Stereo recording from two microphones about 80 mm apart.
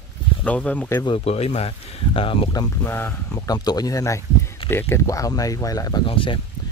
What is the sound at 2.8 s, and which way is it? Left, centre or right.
Speech, left.